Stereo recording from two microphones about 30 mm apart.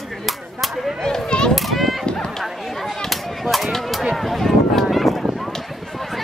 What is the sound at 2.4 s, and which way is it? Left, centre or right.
Chop, centre.